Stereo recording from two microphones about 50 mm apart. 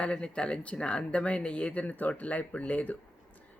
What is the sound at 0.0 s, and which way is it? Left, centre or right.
Speech, left.